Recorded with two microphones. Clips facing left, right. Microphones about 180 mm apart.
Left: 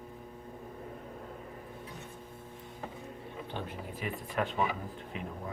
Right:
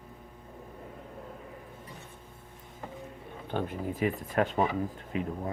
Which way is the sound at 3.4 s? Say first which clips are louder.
Right 10 dB; 50° right (ahead or behind).